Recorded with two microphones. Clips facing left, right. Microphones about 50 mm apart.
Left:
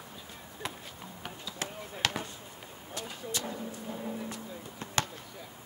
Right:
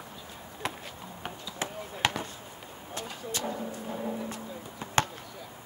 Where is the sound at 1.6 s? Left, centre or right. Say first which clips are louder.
Right 3 dB; right.